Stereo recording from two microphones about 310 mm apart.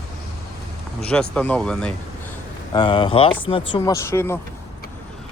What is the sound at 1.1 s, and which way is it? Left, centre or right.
Speech, centre.